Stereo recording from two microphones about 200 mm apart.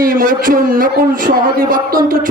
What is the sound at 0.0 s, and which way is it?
A man's voice, 45° right (ahead or behind).